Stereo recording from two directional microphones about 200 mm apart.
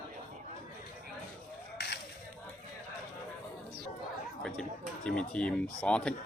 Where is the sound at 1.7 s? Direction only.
50° left (ahead or behind).